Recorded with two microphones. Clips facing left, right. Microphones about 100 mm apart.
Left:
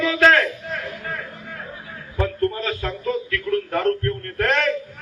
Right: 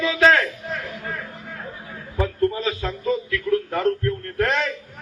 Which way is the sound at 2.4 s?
15° right (ahead or behind).